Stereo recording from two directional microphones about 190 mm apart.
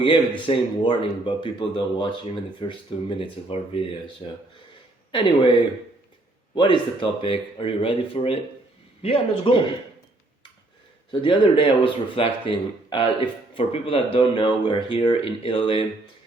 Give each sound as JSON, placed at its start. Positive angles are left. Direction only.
{"t": 0.0, "sound": "speech", "side_deg": 25}
{"t": 11.1, "sound": "speech", "side_deg": 25}